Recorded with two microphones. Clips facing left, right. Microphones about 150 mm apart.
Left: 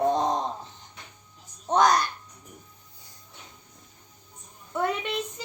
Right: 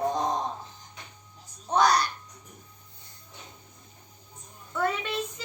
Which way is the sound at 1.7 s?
20° left (ahead or behind).